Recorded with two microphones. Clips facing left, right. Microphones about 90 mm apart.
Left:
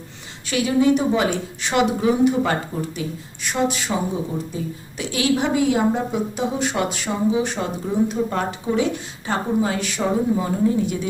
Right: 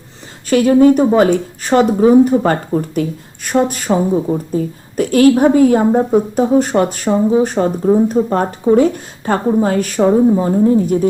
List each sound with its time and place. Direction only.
0.5 s a woman's voice: 45° right (ahead or behind)